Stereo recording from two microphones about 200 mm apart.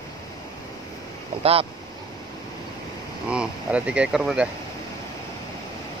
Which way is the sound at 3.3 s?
5° right (ahead or behind).